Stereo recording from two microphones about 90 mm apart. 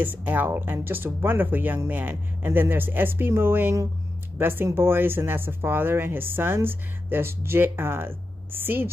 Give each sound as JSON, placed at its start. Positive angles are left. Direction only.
{"t": 0.0, "sound": "speech", "side_deg": -20}